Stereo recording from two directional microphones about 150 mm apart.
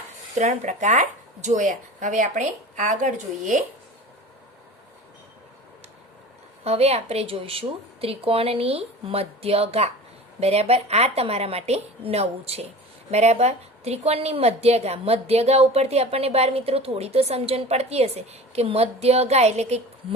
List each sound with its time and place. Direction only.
0.3 s speech: 50° right (ahead or behind)
6.7 s a woman's voice: 45° right (ahead or behind)